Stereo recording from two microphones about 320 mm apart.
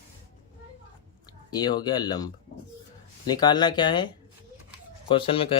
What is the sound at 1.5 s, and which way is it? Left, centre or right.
Speech, centre.